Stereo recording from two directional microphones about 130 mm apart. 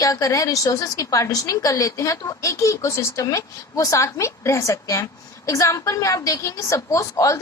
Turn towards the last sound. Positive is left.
turn(degrees=25)  # may be behind; listen again after turning